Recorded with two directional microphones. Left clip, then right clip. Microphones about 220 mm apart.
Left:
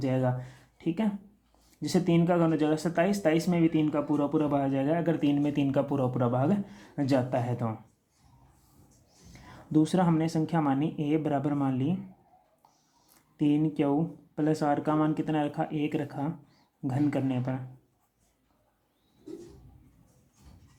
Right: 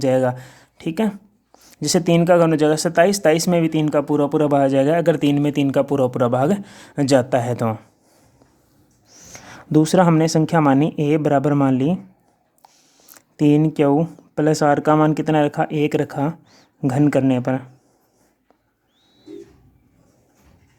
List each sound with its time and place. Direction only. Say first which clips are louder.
0.0 s speech: right 12 dB; 50° right (ahead or behind)
9.0 s speech: right 13 dB; 50° right (ahead or behind)
12.6 s speech: right 12 dB; 55° right (ahead or behind)